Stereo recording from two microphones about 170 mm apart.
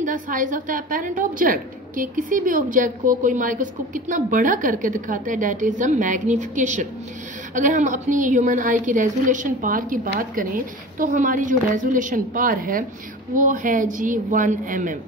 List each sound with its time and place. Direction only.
0.0 s a woman's voice: 50° right (ahead or behind)